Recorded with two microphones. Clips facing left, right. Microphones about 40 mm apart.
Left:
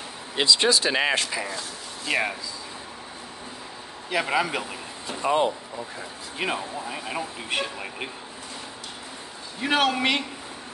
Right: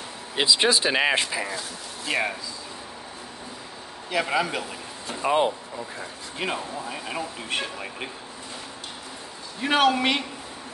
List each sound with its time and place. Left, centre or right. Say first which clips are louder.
0.4 s speech: even; centre
2.0 s speech: left 1 dB; centre
4.1 s speech: even; centre
5.2 s speech: even; centre
6.3 s speech: left 1 dB; centre
9.6 s speech: right 2 dB; centre